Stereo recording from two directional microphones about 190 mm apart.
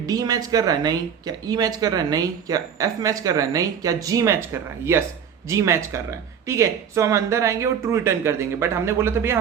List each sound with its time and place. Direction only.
0.0 s speech: 20° right (ahead or behind)
5.5 s speech: 15° right (ahead or behind)